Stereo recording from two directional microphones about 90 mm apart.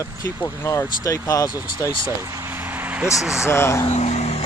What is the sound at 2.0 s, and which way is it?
Speech, 35° right (ahead or behind).